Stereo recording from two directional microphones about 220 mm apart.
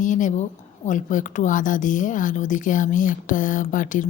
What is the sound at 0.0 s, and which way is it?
A woman's voice, 35° left (ahead or behind).